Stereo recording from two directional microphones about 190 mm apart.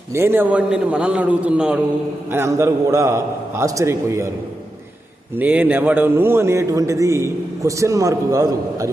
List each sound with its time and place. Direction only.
0.1 s a man's voice: 10° right (ahead or behind)
5.4 s a man's voice: 10° right (ahead or behind)